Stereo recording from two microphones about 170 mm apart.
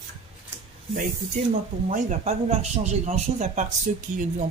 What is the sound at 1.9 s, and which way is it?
Speech, 40° right (ahead or behind).